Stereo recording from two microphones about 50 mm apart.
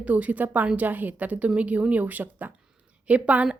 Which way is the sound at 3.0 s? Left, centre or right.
Right.